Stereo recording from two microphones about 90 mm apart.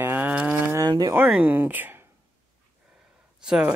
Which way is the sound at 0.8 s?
45° right (ahead or behind).